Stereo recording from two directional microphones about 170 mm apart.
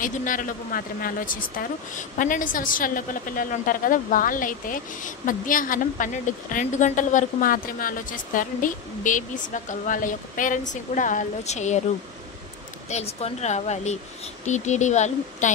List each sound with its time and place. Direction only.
0.0 s a woman's voice: 50° left (ahead or behind)
12.9 s a woman's voice: 40° left (ahead or behind)